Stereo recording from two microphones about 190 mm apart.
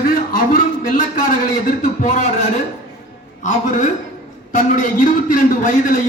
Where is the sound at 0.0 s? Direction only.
45° left (ahead or behind).